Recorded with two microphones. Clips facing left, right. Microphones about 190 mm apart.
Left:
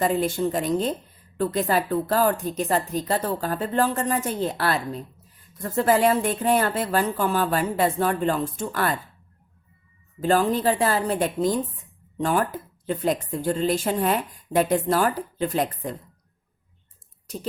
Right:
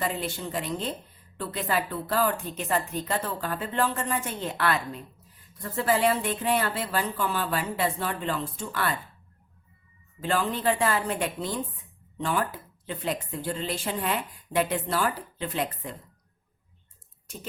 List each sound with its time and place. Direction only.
0.0 s a woman's voice: 45° left (ahead or behind)
10.2 s a woman's voice: 40° left (ahead or behind)
17.3 s a woman's voice: 35° left (ahead or behind)